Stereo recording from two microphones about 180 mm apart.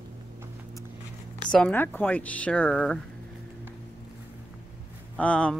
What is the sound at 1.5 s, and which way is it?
Speech, 5° left (ahead or behind).